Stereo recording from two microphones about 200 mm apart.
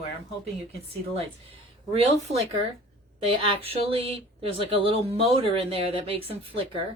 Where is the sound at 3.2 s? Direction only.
25° right (ahead or behind).